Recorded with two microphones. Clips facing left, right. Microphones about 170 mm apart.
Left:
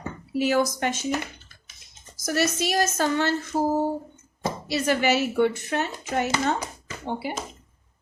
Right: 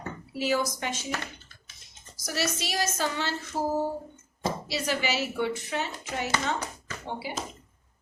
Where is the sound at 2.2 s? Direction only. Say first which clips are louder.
Left 7 dB; 50° left (ahead or behind).